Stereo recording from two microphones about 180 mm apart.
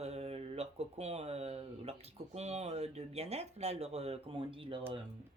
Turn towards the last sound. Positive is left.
turn(degrees=-30)  # may be behind; listen again after turning